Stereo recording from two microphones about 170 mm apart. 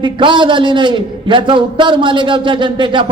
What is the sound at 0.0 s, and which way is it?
A man's voice, 30° right (ahead or behind).